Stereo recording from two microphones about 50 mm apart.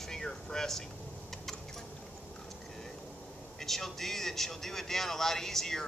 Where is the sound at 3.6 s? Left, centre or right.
Centre.